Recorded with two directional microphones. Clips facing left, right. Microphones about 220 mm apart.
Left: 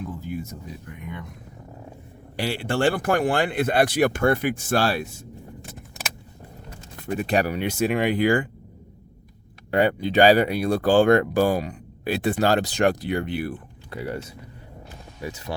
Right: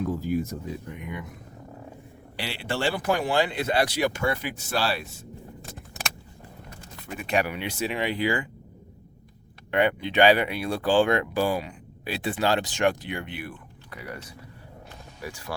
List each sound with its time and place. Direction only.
1.0 s speech: 10° right (ahead or behind)
2.3 s speech: 45° left (ahead or behind)
7.1 s speech: 35° left (ahead or behind)
9.7 s speech: 35° left (ahead or behind); by 15.5 s 20° left (ahead or behind)